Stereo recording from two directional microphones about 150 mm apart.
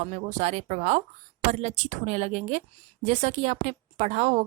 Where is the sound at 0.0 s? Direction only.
50° right (ahead or behind).